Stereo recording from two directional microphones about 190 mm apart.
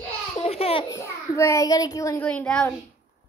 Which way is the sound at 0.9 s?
15° left (ahead or behind).